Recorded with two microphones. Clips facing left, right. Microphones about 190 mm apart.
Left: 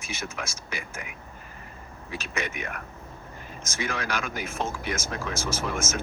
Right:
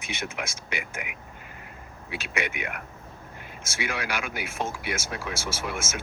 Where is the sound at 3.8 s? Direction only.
10° right (ahead or behind).